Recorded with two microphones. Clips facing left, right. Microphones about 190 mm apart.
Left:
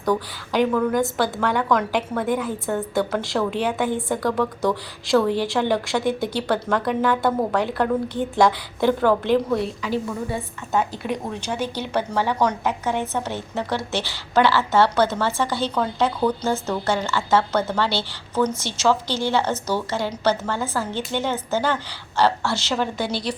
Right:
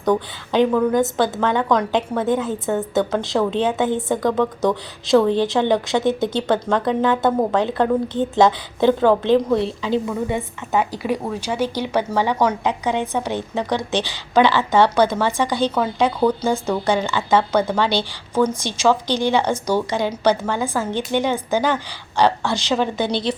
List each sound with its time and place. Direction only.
0.0 s a woman's voice: 20° right (ahead or behind)